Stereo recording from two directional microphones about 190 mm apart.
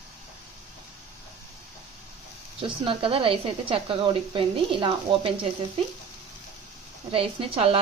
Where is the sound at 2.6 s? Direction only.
25° right (ahead or behind).